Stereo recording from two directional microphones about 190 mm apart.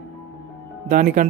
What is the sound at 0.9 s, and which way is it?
Speech, 45° right (ahead or behind).